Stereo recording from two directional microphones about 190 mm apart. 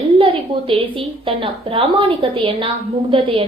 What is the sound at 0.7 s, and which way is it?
A woman's voice, 30° right (ahead or behind).